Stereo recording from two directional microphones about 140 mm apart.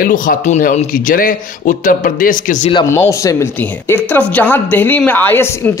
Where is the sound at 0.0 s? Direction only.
80° left.